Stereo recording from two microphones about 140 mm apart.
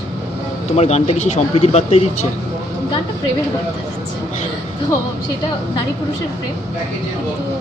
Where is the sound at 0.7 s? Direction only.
50° left (ahead or behind).